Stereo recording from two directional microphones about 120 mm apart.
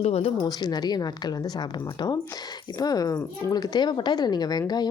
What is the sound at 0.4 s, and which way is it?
Speech, 35° left (ahead or behind).